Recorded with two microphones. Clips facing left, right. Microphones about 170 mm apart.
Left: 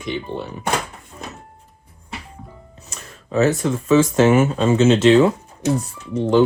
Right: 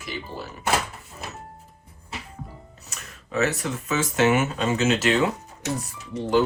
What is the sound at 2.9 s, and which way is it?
Speech, 35° left (ahead or behind).